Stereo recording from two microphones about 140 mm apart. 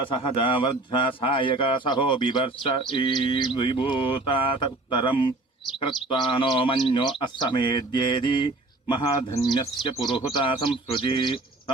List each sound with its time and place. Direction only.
0.1 s a man's voice: 40° left (ahead or behind)